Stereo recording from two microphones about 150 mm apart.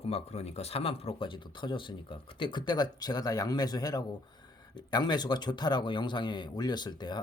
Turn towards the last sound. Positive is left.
turn(degrees=30)  # may be behind; listen again after turning